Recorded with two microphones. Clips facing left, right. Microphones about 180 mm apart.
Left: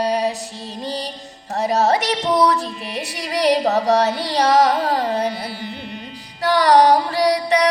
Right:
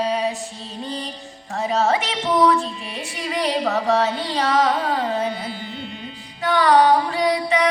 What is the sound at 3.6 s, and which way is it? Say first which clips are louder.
Music: left 3 dB; 40° left (ahead or behind).